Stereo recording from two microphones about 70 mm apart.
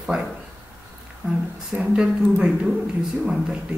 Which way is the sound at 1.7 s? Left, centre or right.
Centre.